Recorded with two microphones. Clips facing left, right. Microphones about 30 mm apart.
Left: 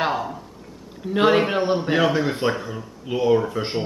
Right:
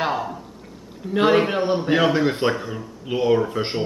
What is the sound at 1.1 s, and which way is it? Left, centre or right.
Speech, centre.